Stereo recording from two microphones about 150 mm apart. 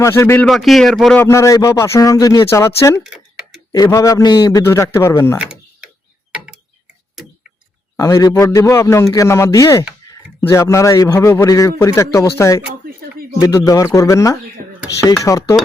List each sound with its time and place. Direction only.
0.0 s a man's voice: 20° left (ahead or behind)
0.4 s speech: centre (ahead or behind)
1.2 s a man's voice: 20° left (ahead or behind)
3.0 s tick-tock: 5° right (ahead or behind)
3.7 s a man's voice: 20° left (ahead or behind)
5.4 s a sound: 5° right (ahead or behind)
7.9 s a man's voice: 20° left (ahead or behind)